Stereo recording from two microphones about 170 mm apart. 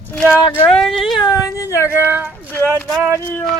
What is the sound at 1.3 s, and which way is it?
Speech, 20° left (ahead or behind).